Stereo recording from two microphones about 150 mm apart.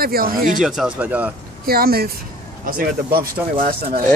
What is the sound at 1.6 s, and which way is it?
Speech, 90° right.